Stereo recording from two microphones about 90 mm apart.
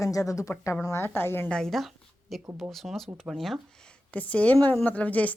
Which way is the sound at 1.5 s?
5° left (ahead or behind).